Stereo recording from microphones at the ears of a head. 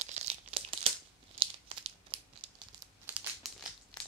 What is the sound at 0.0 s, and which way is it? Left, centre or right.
Crumpling, right.